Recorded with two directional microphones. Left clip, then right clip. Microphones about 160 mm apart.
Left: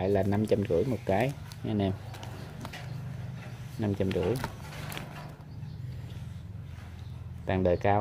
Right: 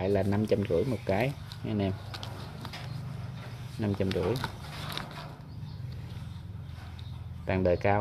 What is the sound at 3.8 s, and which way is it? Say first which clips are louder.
Speech: left 1 dB; 15° left (ahead or behind).